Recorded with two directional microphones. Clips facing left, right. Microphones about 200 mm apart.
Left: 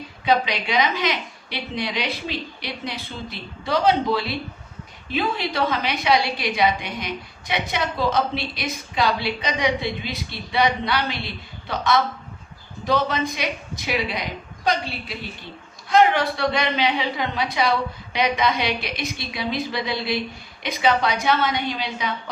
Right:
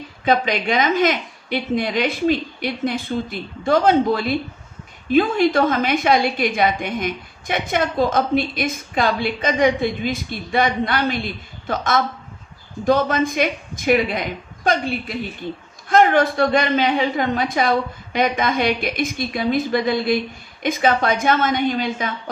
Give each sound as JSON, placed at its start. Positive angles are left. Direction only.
{"t": 0.3, "sound": "a woman's voice", "side_deg": -50}